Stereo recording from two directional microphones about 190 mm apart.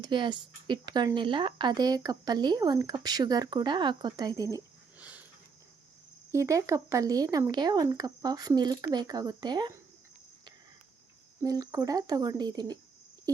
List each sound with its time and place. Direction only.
0.0 s speech: 25° right (ahead or behind); by 5.2 s 5° right (ahead or behind)
6.3 s speech: 15° right (ahead or behind)
11.4 s speech: 20° right (ahead or behind)